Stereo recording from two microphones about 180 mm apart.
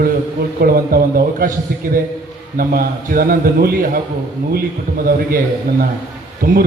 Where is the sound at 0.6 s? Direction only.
55° right (ahead or behind).